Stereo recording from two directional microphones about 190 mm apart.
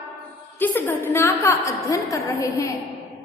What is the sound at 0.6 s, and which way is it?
A woman's voice, 10° left (ahead or behind).